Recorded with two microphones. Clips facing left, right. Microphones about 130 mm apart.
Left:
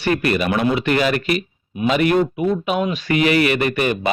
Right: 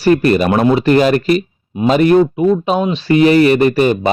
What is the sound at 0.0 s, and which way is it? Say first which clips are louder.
Speech: right 8 dB; 35° right (ahead or behind).